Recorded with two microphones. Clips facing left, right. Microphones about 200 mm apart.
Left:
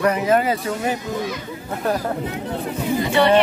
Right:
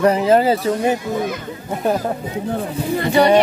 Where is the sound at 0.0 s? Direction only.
30° right (ahead or behind).